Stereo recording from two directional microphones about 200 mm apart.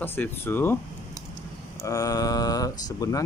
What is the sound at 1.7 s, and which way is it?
Speech, 15° left (ahead or behind).